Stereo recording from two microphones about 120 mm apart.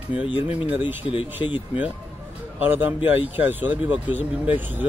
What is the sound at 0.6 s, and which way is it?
Speech, 15° right (ahead or behind).